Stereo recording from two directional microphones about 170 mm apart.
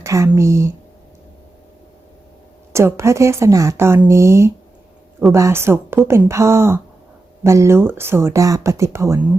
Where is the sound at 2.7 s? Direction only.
15° right (ahead or behind).